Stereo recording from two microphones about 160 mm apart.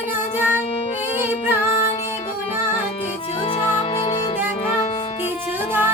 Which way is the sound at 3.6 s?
25° left (ahead or behind).